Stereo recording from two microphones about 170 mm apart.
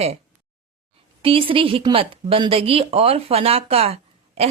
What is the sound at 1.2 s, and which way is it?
A woman's voice, 30° right (ahead or behind).